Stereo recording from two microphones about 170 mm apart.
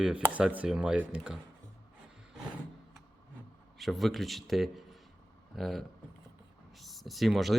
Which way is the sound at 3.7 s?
Centre (ahead or behind).